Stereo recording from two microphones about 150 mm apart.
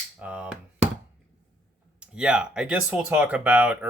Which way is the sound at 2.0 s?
5° right (ahead or behind).